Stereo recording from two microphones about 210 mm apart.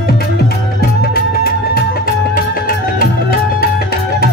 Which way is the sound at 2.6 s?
45° left (ahead or behind).